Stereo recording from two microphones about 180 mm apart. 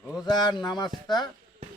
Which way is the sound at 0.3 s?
20° left (ahead or behind).